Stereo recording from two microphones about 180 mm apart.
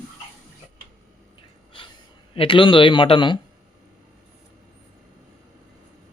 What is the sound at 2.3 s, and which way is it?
A man's voice, 30° left (ahead or behind).